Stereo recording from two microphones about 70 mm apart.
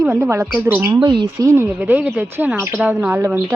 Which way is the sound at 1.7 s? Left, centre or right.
Right.